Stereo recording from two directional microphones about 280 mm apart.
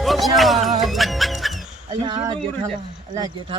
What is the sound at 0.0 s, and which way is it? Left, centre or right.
Speech, centre.